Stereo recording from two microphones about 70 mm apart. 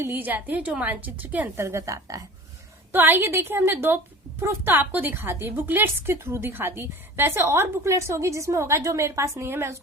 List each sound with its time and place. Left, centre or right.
0.1 s a woman's voice: right
1.5 s a woman's voice: right
2.9 s a woman's voice: right
9.5 s a woman's voice: right